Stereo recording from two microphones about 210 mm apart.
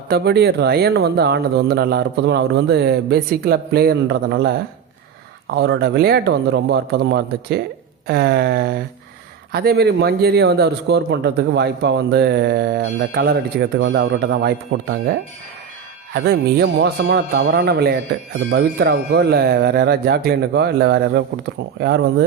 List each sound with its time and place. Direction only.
0.1 s speech: 50° right (ahead or behind)
5.5 s speech: 50° right (ahead or behind)
16.1 s speech: 50° right (ahead or behind)